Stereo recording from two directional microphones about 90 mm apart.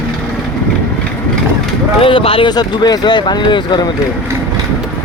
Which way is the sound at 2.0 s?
80° left.